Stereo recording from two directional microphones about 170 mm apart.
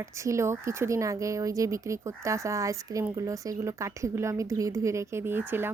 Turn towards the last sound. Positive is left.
turn(degrees=-15)  # may be behind; listen again after turning